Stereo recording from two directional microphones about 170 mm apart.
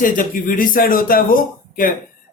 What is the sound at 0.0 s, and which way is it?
A man's voice, 55° left (ahead or behind).